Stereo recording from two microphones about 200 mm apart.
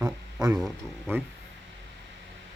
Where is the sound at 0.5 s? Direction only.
5° right (ahead or behind).